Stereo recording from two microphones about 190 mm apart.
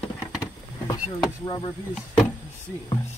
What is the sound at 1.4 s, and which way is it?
Speech, 20° left (ahead or behind).